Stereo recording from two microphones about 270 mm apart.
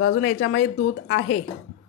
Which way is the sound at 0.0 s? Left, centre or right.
Left.